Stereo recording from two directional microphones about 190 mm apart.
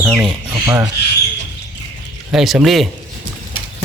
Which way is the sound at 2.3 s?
Centre (ahead or behind).